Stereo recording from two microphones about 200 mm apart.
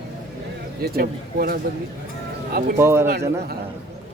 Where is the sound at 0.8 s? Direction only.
50° right (ahead or behind).